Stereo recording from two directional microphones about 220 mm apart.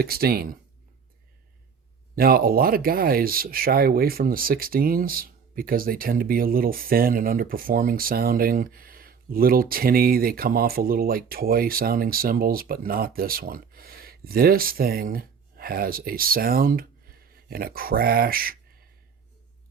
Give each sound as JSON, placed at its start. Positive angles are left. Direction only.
{"t": 0.0, "sound": "speech", "side_deg": -45}
{"t": 2.1, "sound": "speech", "side_deg": -40}